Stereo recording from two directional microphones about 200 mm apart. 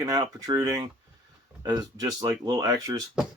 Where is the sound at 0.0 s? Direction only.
20° right (ahead or behind).